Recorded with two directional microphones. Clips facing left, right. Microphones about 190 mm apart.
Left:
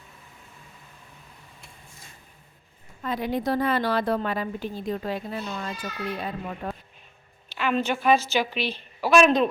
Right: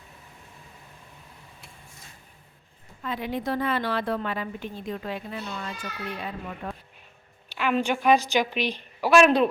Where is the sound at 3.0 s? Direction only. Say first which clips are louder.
Left 3 dB; 40° left (ahead or behind).